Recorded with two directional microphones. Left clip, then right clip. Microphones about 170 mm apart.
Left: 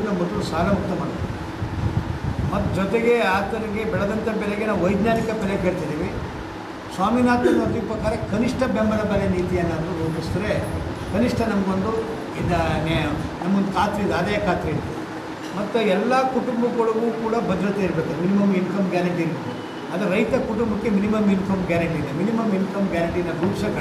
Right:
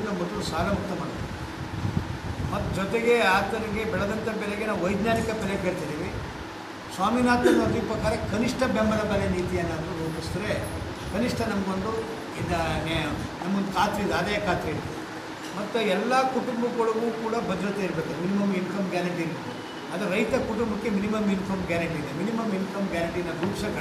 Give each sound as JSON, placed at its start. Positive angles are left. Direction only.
{"t": 0.4, "sound": "speech", "side_deg": 5}
{"t": 2.5, "sound": "a man's voice", "side_deg": 5}
{"t": 7.0, "sound": "a man's voice", "side_deg": 5}
{"t": 16.3, "sound": "speech", "side_deg": 20}
{"t": 17.3, "sound": "a man's voice", "side_deg": 5}